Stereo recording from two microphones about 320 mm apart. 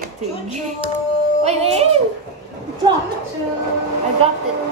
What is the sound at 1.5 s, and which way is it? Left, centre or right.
Speech, centre.